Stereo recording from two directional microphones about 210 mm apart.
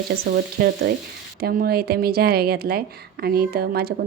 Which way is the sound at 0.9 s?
50° right (ahead or behind).